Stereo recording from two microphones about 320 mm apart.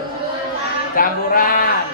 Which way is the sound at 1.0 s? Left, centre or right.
Left.